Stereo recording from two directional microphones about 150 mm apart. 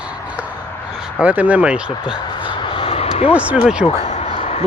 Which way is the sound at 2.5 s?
35° left (ahead or behind).